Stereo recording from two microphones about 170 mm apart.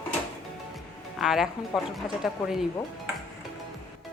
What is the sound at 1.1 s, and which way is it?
Speech, centre (ahead or behind).